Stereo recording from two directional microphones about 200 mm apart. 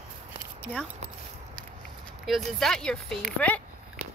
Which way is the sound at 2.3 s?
Centre (ahead or behind).